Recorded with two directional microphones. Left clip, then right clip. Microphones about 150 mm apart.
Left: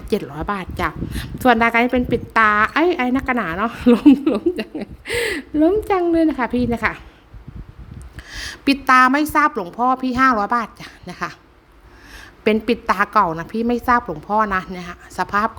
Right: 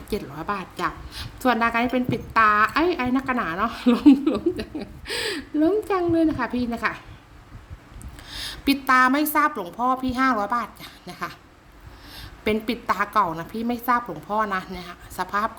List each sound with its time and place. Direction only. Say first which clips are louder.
0.1 s a woman's voice: left 6 dB; 45° left (ahead or behind)
8.3 s a woman's voice: left 4 dB; 40° left (ahead or behind)
12.6 s a woman's voice: left 6 dB; 45° left (ahead or behind)